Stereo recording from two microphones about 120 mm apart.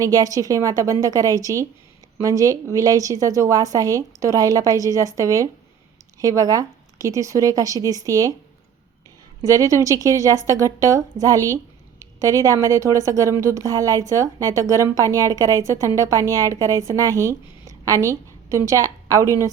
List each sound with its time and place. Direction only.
0.0 s a woman's voice: 30° right (ahead or behind)
9.4 s a woman's voice: 30° right (ahead or behind)